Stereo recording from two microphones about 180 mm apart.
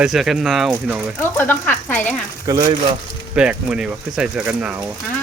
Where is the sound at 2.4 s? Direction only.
20° right (ahead or behind).